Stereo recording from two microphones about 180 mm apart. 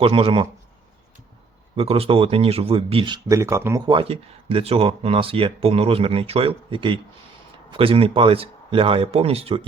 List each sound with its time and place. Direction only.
0.0 s speech: 30° right (ahead or behind)
1.7 s speech: 30° right (ahead or behind)
3.2 s speech: 15° right (ahead or behind); by 9.6 s 30° right (ahead or behind)